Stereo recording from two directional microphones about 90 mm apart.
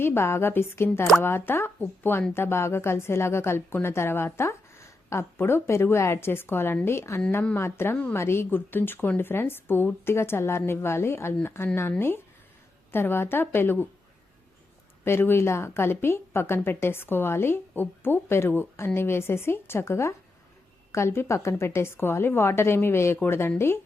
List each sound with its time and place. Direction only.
0.0 s a woman's voice: 25° left (ahead or behind)
15.0 s a woman's voice: 25° left (ahead or behind)